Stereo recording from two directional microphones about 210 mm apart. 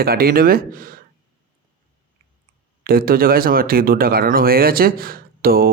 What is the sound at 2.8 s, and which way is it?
Speech, 45° right (ahead or behind).